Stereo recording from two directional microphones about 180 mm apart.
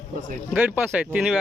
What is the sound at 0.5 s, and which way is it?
Speech, 10° right (ahead or behind).